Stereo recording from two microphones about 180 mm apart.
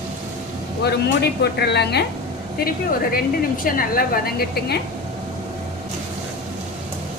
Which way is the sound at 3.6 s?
50° left (ahead or behind).